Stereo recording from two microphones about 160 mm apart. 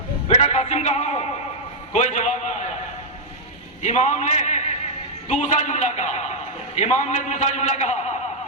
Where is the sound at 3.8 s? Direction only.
45° left (ahead or behind).